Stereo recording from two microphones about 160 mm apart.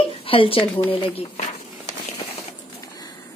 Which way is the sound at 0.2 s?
35° left (ahead or behind).